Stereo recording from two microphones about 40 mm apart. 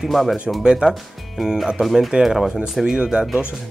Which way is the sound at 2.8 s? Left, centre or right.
Right.